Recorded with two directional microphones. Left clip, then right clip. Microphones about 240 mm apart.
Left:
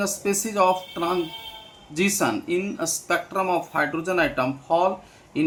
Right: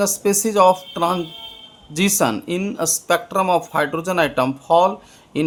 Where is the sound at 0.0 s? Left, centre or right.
Right.